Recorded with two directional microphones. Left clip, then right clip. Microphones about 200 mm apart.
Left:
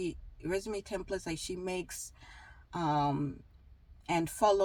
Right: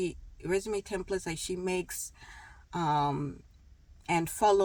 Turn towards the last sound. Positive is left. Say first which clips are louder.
# right 2 dB
turn(degrees=-20)  # may be behind; listen again after turning